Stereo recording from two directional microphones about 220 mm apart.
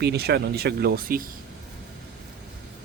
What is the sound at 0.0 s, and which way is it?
Speech, 50° right (ahead or behind).